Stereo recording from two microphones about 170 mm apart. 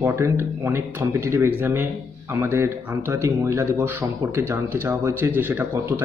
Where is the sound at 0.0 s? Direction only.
15° right (ahead or behind).